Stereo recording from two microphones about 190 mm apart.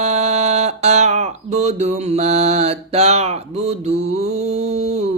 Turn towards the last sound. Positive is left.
turn(degrees=-35)  # may be behind; listen again after turning